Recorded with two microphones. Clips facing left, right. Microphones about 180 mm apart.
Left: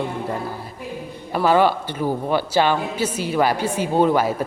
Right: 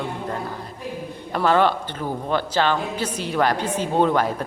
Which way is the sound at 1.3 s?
5° left (ahead or behind).